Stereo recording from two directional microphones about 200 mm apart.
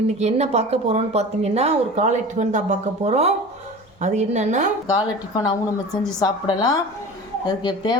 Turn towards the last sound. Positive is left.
turn(degrees=20)  # may be behind; listen again after turning